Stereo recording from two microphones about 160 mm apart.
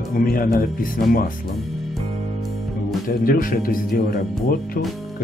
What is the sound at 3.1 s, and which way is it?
Speech, 65° left (ahead or behind).